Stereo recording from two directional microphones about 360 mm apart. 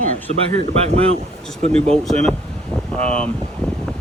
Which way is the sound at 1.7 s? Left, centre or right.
Centre.